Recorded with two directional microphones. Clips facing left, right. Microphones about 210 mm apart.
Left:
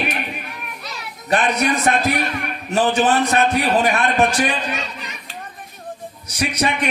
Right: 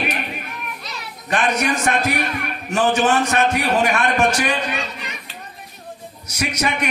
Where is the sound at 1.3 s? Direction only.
35° left (ahead or behind).